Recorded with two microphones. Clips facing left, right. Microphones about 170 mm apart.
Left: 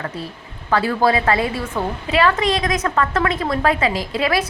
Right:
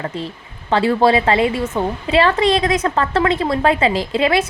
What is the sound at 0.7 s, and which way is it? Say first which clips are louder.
A woman's voice: right 3 dB; 25° right (ahead or behind).